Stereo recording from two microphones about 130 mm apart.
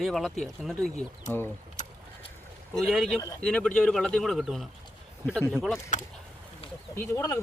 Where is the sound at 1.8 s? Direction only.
70° left (ahead or behind).